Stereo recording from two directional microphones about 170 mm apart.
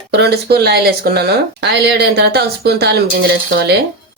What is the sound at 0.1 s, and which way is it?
Speech, 70° right (ahead or behind).